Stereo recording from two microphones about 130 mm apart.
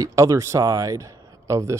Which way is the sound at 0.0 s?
25° right (ahead or behind).